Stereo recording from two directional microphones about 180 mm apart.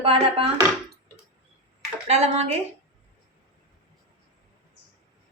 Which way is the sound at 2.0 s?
35° right (ahead or behind).